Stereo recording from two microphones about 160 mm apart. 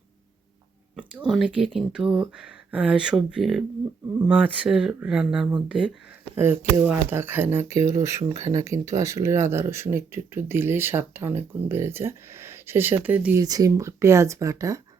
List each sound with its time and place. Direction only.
1.2 s speech: centre (ahead or behind)
13.4 s speech: 25° right (ahead or behind)